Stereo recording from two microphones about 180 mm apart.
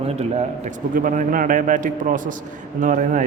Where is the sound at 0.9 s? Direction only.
50° right (ahead or behind).